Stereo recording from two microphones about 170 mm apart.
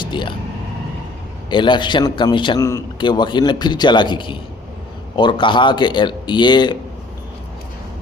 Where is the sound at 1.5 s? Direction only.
30° left (ahead or behind).